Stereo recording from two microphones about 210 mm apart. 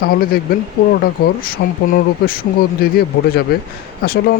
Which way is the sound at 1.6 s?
50° left (ahead or behind).